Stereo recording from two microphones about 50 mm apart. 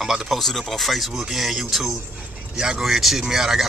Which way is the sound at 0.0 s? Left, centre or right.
Centre.